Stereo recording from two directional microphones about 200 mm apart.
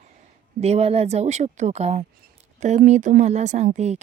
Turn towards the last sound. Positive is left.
turn(degrees=-35)  # may be behind; listen again after turning